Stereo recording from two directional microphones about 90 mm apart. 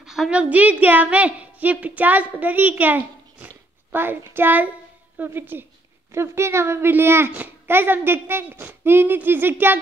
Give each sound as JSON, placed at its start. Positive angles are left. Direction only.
{"t": 0.0, "sound": "a woman's voice", "side_deg": -5}